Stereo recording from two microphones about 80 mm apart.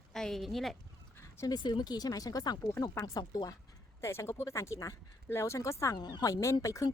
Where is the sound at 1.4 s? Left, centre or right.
Left.